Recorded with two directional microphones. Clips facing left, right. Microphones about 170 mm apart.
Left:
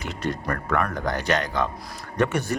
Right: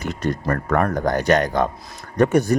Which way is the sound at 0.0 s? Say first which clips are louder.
Right 5 dB; 45° right (ahead or behind).